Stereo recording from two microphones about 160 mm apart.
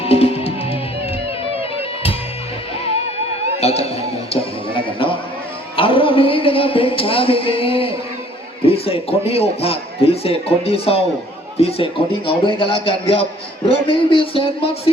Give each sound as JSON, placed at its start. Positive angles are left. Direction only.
{"t": 0.0, "sound": "music", "side_deg": 40}
{"t": 3.6, "sound": "music", "side_deg": 40}
{"t": 5.7, "sound": "a man's voice", "side_deg": 35}